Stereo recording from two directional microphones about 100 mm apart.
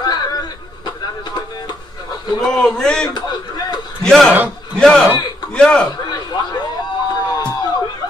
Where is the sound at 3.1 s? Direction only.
45° left (ahead or behind).